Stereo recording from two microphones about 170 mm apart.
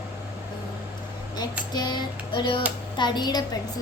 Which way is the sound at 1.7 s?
25° left (ahead or behind).